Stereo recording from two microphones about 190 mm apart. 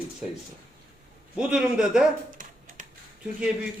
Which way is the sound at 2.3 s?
45° right (ahead or behind).